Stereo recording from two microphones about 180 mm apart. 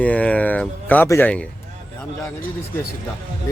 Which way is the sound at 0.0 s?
5° left (ahead or behind).